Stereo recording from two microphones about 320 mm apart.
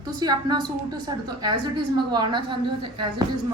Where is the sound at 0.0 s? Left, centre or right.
Centre.